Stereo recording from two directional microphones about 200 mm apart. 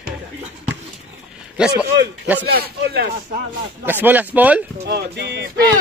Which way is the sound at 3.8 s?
10° right (ahead or behind).